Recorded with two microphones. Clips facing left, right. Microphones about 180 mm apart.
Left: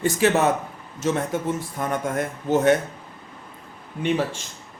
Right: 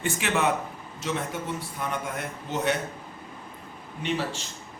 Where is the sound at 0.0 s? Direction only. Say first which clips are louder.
Left 7 dB; 40° left (ahead or behind).